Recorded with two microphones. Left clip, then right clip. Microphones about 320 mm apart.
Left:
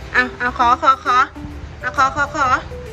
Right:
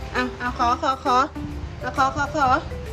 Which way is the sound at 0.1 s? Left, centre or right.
Centre.